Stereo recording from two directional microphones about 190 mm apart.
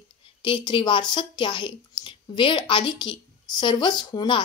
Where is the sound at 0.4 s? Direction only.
25° left (ahead or behind).